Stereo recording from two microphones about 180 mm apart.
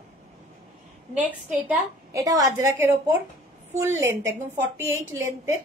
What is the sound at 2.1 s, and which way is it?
A woman's voice, 20° right (ahead or behind).